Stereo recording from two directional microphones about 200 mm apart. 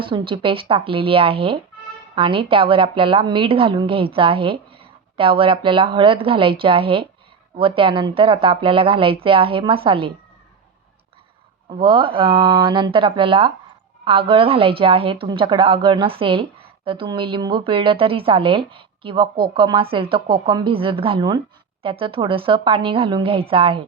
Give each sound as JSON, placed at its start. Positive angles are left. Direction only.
{"t": 0.0, "sound": "a woman's voice", "side_deg": -25}
{"t": 11.7, "sound": "a woman's voice", "side_deg": -25}